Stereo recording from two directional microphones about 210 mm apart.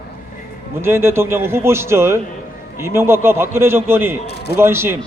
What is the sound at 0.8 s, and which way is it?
A man's voice, 10° right (ahead or behind).